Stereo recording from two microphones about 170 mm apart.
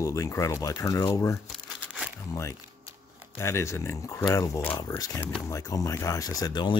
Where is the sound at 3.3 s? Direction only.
15° left (ahead or behind).